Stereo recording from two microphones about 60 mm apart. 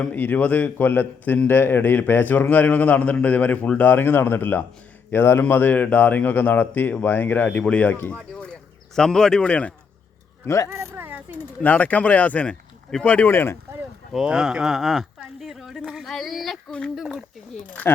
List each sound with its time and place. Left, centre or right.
0.1 s a man's voice: left
10.4 s speech: left
10.7 s speech: right
11.0 s a sound: right
11.6 s a man's voice: left
13.3 s speech: left
14.3 s speech: centre
17.8 s a man's voice: left